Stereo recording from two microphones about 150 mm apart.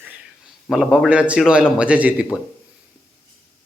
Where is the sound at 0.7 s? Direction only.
5° right (ahead or behind).